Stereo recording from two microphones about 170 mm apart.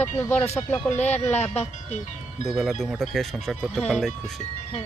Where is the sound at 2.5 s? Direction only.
Centre (ahead or behind).